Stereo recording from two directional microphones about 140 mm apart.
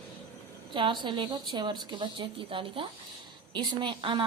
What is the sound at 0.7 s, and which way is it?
A woman's voice, 35° right (ahead or behind).